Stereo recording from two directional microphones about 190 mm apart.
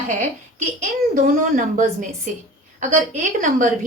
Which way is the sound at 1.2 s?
45° right (ahead or behind).